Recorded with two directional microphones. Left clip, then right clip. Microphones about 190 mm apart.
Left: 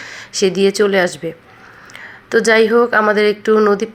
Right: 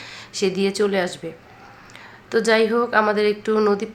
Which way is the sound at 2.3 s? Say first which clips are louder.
Left 6 dB; 25° left (ahead or behind).